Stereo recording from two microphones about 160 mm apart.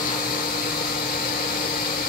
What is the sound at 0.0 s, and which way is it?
Vacuum cleaner, 65° left (ahead or behind).